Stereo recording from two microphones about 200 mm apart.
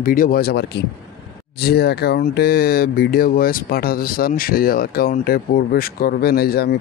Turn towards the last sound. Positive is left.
turn(degrees=50)  # may be behind; listen again after turning